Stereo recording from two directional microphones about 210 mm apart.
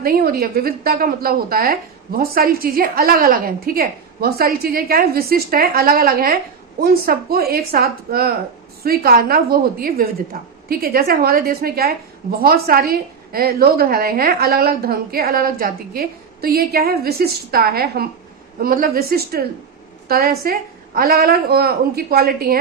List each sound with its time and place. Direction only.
0.0 s a woman's voice: 45° right (ahead or behind)